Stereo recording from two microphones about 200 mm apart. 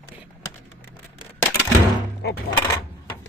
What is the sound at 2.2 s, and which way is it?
Coin, 55° left (ahead or behind).